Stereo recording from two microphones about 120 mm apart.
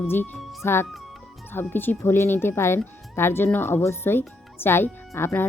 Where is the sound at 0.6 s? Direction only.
20° left (ahead or behind).